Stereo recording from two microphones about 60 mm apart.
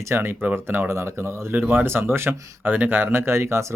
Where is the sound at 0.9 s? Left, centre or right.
Right.